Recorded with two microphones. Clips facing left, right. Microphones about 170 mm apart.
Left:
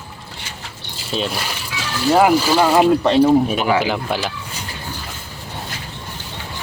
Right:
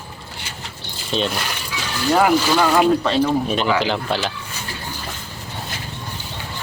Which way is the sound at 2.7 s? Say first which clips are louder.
Left 3 dB; 20° left (ahead or behind).